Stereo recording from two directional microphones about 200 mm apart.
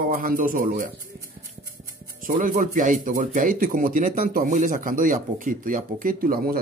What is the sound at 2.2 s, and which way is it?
Speech, 40° right (ahead or behind).